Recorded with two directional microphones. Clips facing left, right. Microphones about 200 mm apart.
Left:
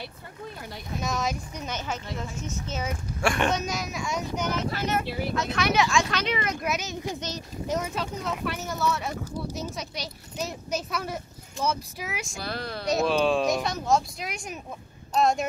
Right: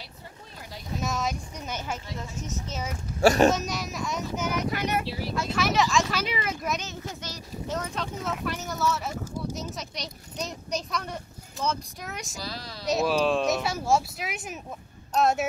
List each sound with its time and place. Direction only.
1.0 s boat: centre (ahead or behind)
3.2 s speech: 35° right (ahead or behind)
3.5 s speech: centre (ahead or behind)
5.0 s speech: 55° left (ahead or behind)
5.3 s speech: 5° right (ahead or behind)
12.4 s speech: 60° left (ahead or behind)
12.8 s speech: centre (ahead or behind)